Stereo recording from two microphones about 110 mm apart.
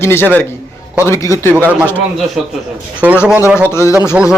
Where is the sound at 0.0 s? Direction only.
20° left (ahead or behind).